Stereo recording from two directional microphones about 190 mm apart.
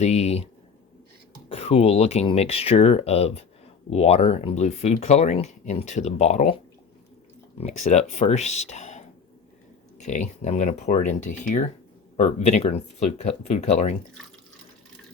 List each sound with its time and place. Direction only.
0.0 s speech: 35° left (ahead or behind)
1.5 s speech: 30° left (ahead or behind)
7.6 s speech: 35° left (ahead or behind)